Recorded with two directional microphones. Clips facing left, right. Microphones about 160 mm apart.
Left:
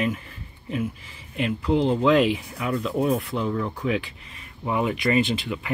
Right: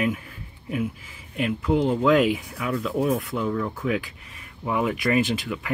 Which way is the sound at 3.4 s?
10° left (ahead or behind).